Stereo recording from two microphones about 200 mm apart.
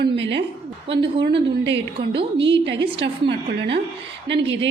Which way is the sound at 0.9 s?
25° right (ahead or behind).